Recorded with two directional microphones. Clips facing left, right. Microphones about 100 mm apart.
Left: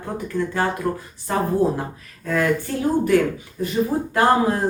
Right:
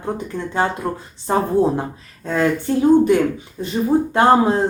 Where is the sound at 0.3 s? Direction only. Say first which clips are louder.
Even; 20° right (ahead or behind).